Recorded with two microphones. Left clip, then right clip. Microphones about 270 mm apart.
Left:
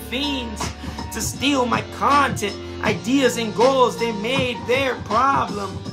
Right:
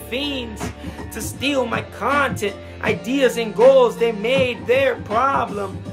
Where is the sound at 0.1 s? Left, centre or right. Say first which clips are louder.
Even; centre.